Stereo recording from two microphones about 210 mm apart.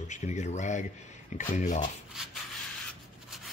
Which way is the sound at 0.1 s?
35° left (ahead or behind).